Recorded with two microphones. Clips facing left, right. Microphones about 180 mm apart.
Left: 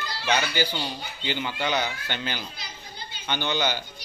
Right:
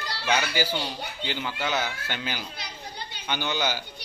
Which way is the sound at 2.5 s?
65° right (ahead or behind).